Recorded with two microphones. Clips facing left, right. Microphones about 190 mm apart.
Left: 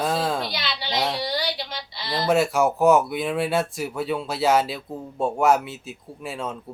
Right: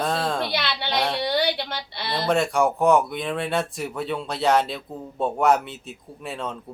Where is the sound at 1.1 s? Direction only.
60° right (ahead or behind).